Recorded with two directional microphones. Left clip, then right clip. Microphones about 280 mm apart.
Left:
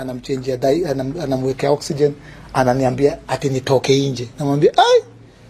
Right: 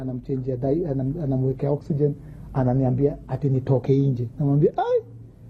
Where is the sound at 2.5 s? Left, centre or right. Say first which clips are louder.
Left 8 dB; centre.